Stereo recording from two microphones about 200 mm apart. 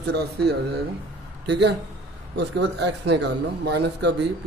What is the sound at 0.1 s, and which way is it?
Speech, 55° right (ahead or behind).